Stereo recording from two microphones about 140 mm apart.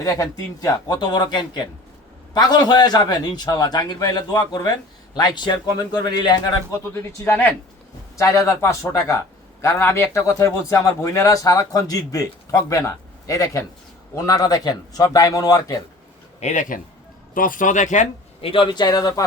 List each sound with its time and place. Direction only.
0.0 s a man's voice: 25° left (ahead or behind)
6.9 s a man's voice: 15° left (ahead or behind)
16.4 s speech: 60° left (ahead or behind)
17.3 s speech: 75° left (ahead or behind)
18.4 s speech: 40° left (ahead or behind)